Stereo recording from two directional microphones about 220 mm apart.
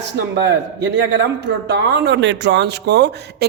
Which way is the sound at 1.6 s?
55° right (ahead or behind).